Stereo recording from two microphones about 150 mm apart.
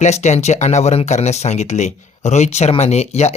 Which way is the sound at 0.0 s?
50° left (ahead or behind).